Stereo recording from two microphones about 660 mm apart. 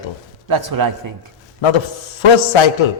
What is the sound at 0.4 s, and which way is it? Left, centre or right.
Speech, right.